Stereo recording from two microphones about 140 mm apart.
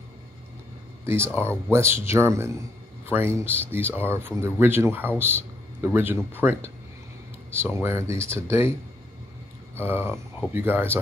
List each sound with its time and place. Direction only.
1.0 s a man's voice: 15° right (ahead or behind)
9.8 s speech: 15° right (ahead or behind)